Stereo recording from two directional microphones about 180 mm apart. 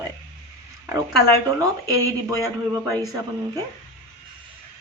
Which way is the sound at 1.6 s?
20° right (ahead or behind).